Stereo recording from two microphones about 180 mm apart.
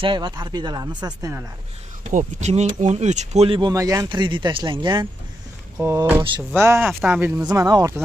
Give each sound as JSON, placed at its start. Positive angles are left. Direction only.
{"t": 0.0, "sound": "speech", "side_deg": -25}
{"t": 2.0, "sound": "speech", "side_deg": -40}
{"t": 5.8, "sound": "speech", "side_deg": -15}
{"t": 7.4, "sound": "speech", "side_deg": -20}